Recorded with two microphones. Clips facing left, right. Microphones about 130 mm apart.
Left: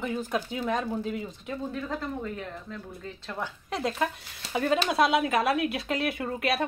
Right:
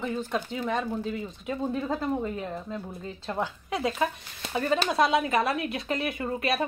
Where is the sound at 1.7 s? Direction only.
20° right (ahead or behind).